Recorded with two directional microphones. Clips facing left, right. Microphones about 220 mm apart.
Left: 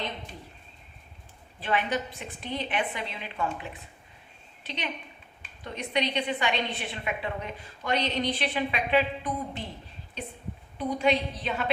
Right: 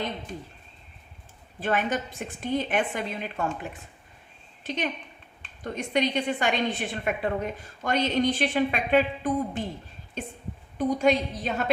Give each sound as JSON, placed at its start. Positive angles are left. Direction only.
{"t": 1.5, "sound": "a woman's voice", "side_deg": -45}